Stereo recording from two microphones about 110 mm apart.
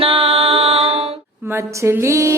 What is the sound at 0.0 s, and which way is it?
Music, 60° right (ahead or behind).